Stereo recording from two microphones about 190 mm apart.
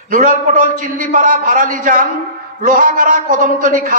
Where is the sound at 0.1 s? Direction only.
45° right (ahead or behind).